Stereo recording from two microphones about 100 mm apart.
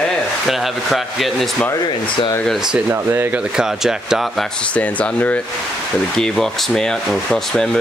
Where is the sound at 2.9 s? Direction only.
25° right (ahead or behind).